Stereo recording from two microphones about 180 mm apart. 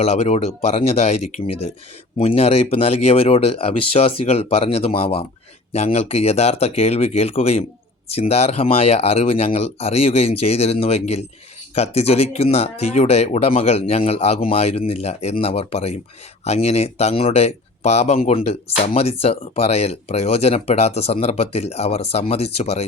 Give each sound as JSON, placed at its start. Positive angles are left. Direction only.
{"t": 0.0, "sound": "speech", "side_deg": 35}